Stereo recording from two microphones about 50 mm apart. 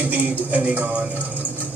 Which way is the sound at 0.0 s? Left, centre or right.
Right.